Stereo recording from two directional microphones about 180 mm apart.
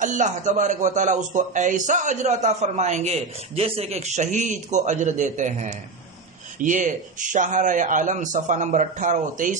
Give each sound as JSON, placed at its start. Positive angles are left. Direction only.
{"t": 0.0, "sound": "a man's voice", "side_deg": -45}